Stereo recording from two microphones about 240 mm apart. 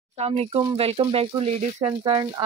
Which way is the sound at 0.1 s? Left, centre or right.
Right.